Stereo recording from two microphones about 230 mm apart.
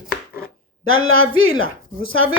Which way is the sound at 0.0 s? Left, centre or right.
Centre.